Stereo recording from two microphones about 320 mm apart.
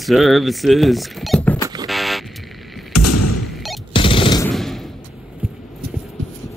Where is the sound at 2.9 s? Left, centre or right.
Left.